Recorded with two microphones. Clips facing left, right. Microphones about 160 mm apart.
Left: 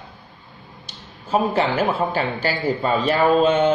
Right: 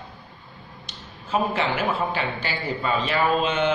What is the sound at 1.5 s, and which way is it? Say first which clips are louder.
A man's voice: left 4 dB; 40° left (ahead or behind).